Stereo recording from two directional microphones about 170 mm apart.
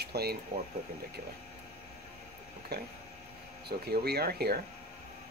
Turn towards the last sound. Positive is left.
turn(degrees=-65)  # may be behind; listen again after turning